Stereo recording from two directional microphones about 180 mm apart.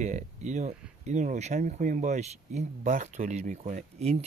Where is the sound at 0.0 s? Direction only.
40° right (ahead or behind).